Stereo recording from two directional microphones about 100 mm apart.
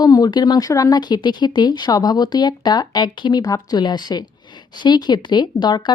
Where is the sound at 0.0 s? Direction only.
40° left (ahead or behind).